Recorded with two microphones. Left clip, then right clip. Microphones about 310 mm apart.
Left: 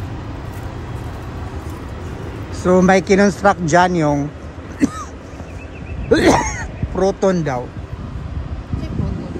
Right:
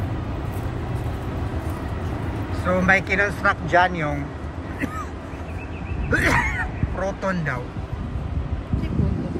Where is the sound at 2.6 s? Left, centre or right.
Centre.